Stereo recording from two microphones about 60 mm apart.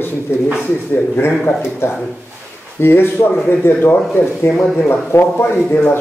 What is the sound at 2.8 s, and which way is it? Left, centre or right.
Speech, left.